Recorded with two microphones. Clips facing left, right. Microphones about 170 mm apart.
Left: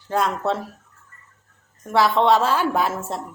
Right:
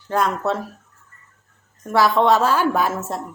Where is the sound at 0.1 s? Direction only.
25° left (ahead or behind).